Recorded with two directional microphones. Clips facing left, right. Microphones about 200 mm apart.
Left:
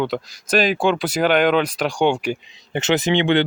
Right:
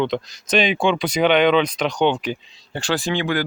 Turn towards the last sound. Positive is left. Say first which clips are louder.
# left 5 dB
turn(degrees=25)  # may be behind; listen again after turning